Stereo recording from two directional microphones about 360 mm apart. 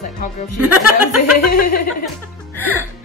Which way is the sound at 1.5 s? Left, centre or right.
Left.